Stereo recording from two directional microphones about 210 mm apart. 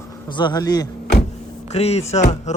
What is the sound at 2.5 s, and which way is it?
Music, 35° left (ahead or behind).